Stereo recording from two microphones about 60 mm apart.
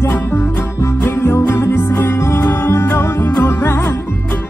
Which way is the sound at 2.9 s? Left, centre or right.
Left.